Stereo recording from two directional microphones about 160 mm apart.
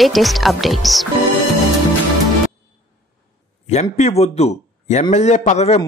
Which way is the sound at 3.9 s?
45° left (ahead or behind).